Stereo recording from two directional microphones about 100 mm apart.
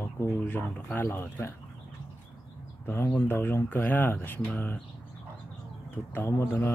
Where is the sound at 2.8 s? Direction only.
25° left (ahead or behind).